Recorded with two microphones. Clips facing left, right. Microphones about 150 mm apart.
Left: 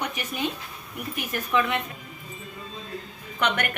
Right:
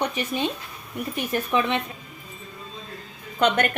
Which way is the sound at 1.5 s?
25° right (ahead or behind).